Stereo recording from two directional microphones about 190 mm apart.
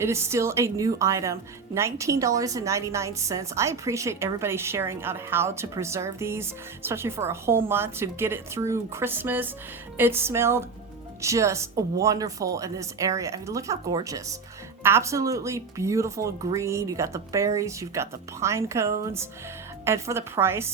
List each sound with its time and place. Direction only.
0.0 s a woman's voice: 15° right (ahead or behind)